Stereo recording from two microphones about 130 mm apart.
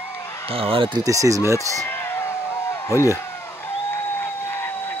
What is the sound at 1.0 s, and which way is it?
Speech, 25° right (ahead or behind).